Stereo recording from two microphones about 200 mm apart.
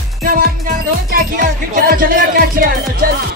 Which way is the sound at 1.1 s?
45° right (ahead or behind).